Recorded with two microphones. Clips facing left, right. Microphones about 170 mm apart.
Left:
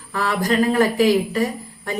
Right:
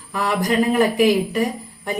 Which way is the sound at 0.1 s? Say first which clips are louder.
Even; 15° right (ahead or behind).